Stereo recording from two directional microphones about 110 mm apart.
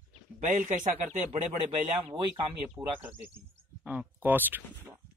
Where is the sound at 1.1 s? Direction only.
90° right.